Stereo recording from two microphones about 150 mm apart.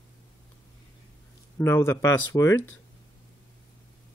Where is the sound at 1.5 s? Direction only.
15° left (ahead or behind).